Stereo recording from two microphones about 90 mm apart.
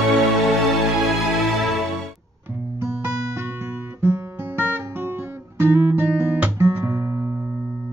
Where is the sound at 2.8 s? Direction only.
25° right (ahead or behind).